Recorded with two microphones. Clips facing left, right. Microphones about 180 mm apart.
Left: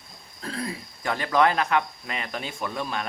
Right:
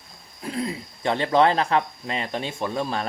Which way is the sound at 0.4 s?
20° right (ahead or behind).